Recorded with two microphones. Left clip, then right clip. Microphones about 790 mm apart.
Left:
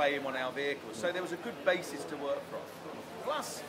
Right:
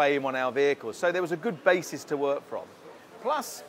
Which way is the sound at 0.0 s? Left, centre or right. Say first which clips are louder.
Right 7 dB; right.